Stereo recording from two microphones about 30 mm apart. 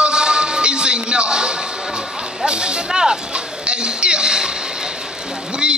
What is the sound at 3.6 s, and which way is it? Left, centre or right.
Speech, right.